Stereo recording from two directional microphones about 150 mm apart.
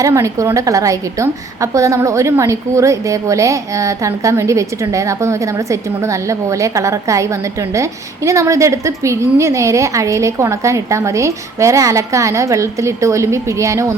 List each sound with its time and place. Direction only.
0.0 s a woman's voice: 20° right (ahead or behind)